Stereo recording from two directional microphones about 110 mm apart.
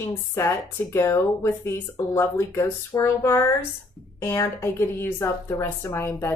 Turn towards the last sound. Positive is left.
turn(degrees=20)  # may be behind; listen again after turning